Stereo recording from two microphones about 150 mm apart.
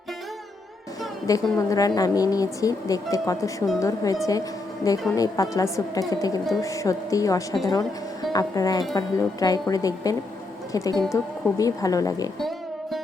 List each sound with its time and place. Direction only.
1.3 s a woman's voice: 25° left (ahead or behind)
12.4 s music: centre (ahead or behind)